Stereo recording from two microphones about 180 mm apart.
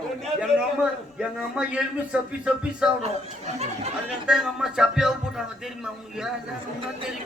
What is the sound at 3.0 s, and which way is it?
Speech, 40° right (ahead or behind).